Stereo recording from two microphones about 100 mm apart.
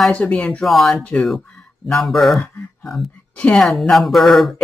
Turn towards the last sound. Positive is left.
turn(degrees=0)  # may be behind; listen again after turning